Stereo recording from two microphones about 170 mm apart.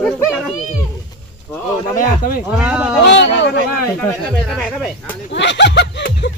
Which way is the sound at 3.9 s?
Centre (ahead or behind).